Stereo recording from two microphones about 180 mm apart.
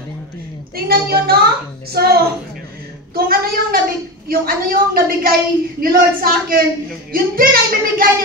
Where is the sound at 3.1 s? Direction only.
55° right (ahead or behind).